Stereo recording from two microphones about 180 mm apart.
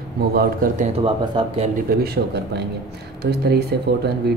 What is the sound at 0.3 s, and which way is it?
Speech, 55° right (ahead or behind).